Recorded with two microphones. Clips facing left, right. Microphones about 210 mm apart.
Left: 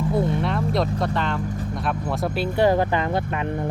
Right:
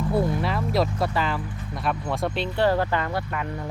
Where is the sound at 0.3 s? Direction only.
Centre (ahead or behind).